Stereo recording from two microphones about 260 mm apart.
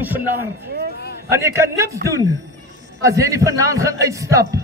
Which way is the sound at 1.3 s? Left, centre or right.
Centre.